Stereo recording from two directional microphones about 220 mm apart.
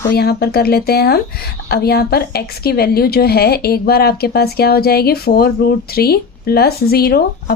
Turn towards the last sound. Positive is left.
turn(degrees=45)  # may be behind; listen again after turning